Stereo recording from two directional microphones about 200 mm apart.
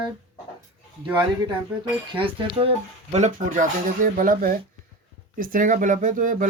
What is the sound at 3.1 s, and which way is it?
Speech, 40° right (ahead or behind).